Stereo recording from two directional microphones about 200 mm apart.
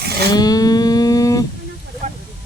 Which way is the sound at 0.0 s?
55° right (ahead or behind).